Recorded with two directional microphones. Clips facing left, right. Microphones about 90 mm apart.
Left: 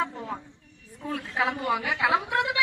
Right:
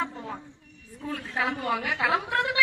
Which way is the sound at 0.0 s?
10° left (ahead or behind).